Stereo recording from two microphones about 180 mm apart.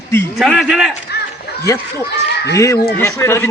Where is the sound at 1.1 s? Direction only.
65° left (ahead or behind).